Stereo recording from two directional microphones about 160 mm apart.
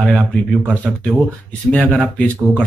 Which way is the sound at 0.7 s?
5° right (ahead or behind).